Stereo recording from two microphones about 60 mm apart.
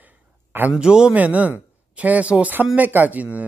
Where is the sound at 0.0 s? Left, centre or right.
Right.